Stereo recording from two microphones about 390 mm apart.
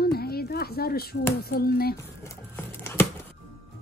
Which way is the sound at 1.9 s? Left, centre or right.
Centre.